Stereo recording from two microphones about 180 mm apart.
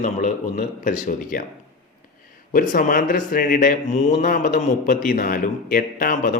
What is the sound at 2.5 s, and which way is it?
Speech, 45° left (ahead or behind).